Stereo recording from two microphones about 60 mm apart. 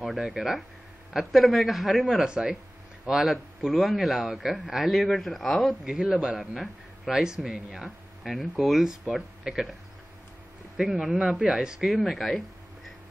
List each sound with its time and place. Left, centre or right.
0.0 s a man's voice: centre
2.2 s a man's voice: centre
10.8 s a man's voice: centre
11.2 s speech: centre